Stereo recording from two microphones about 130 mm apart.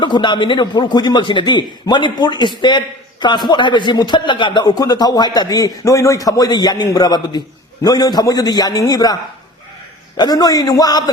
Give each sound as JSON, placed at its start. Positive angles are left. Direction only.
{"t": 0.0, "sound": "a man's voice", "side_deg": 35}
{"t": 10.2, "sound": "a man's voice", "side_deg": 30}